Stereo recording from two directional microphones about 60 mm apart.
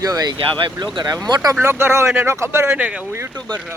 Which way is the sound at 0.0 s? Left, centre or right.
Right.